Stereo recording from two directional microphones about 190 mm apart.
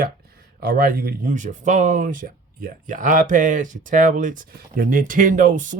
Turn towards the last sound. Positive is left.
turn(degrees=-45)  # may be behind; listen again after turning